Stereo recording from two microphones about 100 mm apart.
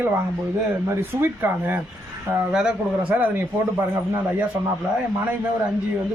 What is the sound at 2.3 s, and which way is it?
A man's voice, 10° right (ahead or behind).